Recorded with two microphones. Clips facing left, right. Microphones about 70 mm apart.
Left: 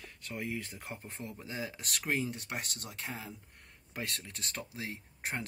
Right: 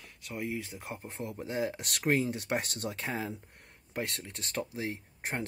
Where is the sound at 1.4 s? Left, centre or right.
Right.